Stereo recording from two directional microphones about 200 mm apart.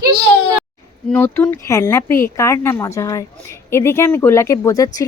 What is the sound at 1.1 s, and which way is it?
A woman's voice, 10° left (ahead or behind).